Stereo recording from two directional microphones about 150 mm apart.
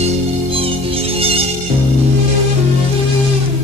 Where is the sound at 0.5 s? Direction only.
40° right (ahead or behind).